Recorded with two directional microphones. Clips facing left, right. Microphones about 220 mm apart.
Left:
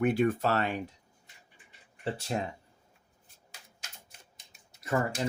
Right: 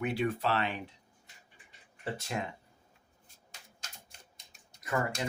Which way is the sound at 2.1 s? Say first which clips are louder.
Left 4 dB; 30° left (ahead or behind).